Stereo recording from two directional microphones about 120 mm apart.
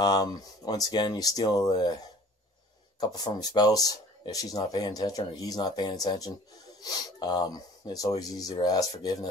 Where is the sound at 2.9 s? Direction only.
35° left (ahead or behind).